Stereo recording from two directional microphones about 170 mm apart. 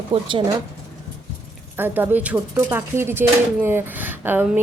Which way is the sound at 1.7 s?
10° right (ahead or behind).